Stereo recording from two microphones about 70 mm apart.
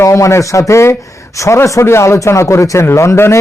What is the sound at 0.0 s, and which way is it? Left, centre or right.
A man's voice, left.